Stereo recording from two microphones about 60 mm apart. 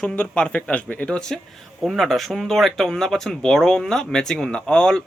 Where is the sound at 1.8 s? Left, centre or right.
Centre.